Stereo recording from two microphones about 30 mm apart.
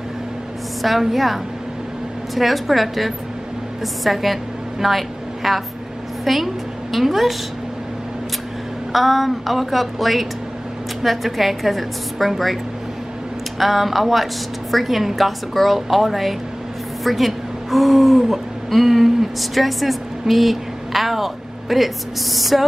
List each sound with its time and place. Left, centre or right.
0.8 s a woman's voice: centre
8.9 s a woman's voice: centre
13.6 s a woman's voice: centre